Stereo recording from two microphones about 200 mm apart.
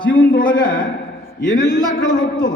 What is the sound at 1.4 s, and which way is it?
Speech, 65° left (ahead or behind).